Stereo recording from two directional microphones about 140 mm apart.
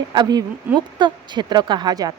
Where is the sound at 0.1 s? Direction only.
30° right (ahead or behind).